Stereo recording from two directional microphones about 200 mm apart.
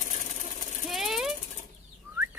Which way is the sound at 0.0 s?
40° left (ahead or behind).